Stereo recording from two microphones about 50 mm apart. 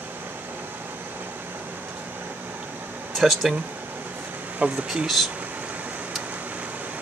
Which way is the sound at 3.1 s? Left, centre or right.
Centre.